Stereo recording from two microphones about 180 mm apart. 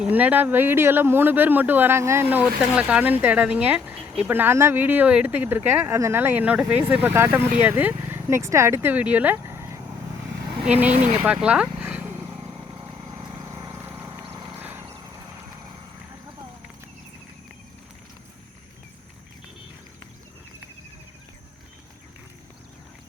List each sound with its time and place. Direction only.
0.0 s speech: 10° right (ahead or behind)
11.4 s a sound: 5° right (ahead or behind)
12.9 s vehicle: 25° right (ahead or behind)
14.4 s horse: 10° right (ahead or behind)